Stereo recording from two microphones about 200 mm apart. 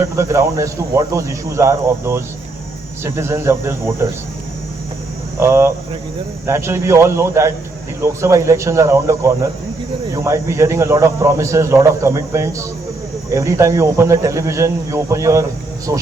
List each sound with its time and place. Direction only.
0.0 s speech: 15° right (ahead or behind)
5.4 s speech: 15° right (ahead or behind)